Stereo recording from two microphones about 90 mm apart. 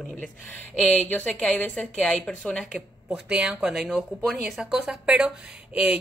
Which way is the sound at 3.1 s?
10° right (ahead or behind).